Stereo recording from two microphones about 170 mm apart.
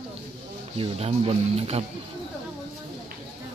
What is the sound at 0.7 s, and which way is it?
Speech, 35° right (ahead or behind).